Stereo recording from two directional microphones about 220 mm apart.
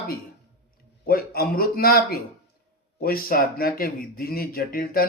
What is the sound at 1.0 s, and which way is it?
Speech, 45° left (ahead or behind).